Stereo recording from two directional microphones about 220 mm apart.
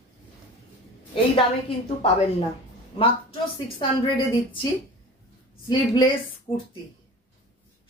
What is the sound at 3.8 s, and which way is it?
Speech, 20° left (ahead or behind).